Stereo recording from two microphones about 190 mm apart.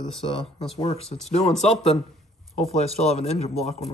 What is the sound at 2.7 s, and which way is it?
Speech, 35° left (ahead or behind).